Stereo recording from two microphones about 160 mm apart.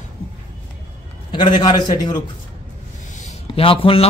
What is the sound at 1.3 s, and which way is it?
Speech, 25° left (ahead or behind).